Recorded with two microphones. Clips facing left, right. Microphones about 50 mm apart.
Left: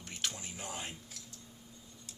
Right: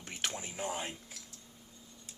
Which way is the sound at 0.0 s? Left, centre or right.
Right.